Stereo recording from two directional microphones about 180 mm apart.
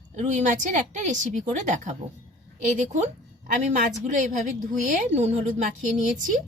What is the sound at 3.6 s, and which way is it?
A woman's voice, 45° right (ahead or behind).